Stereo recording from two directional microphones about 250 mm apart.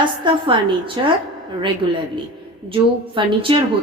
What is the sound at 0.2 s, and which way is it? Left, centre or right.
Speech, centre.